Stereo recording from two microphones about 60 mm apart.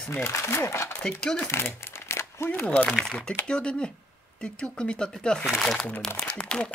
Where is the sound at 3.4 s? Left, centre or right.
Centre.